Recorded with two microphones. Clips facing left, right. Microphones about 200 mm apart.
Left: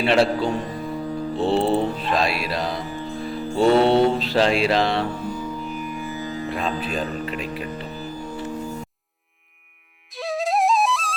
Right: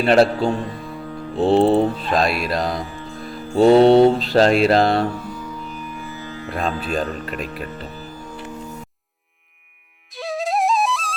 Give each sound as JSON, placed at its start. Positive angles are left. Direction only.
{"t": 0.0, "sound": "mantra", "side_deg": -45}
{"t": 1.4, "sound": "music", "side_deg": -40}
{"t": 2.1, "sound": "mantra", "side_deg": -45}
{"t": 5.9, "sound": "music", "side_deg": 20}
{"t": 6.5, "sound": "mantra", "side_deg": -45}
{"t": 10.1, "sound": "music", "side_deg": 0}